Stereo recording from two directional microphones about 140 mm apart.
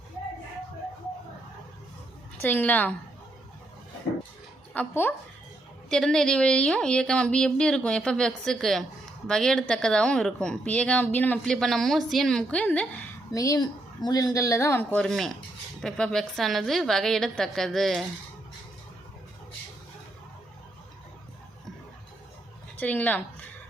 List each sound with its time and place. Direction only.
2.4 s a woman's voice: 10° left (ahead or behind)
4.7 s a woman's voice: 15° left (ahead or behind)
13.3 s speech: 25° left (ahead or behind)
14.9 s speech: centre (ahead or behind)
22.8 s a woman's voice: 10° left (ahead or behind)